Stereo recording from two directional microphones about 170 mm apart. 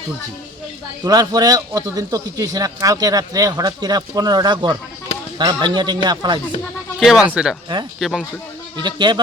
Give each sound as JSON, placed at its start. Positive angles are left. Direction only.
{"t": 1.0, "sound": "speech", "side_deg": -20}
{"t": 7.0, "sound": "speech", "side_deg": 0}
{"t": 8.8, "sound": "speech", "side_deg": -25}